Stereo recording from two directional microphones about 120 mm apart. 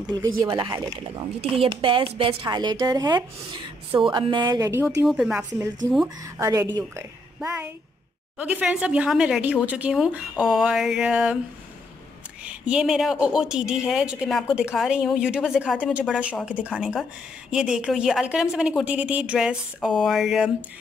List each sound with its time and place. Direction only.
0.0 s speech: 35° right (ahead or behind)
4.6 s speech: 20° right (ahead or behind)
4.8 s a woman's voice: 5° right (ahead or behind)
6.0 s speech: 25° right (ahead or behind)
8.4 s a woman's voice: 10° right (ahead or behind)
12.4 s a woman's voice: 10° right (ahead or behind)